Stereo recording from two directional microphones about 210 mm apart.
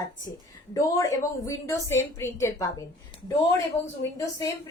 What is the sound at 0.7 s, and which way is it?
A woman's voice, 15° left (ahead or behind).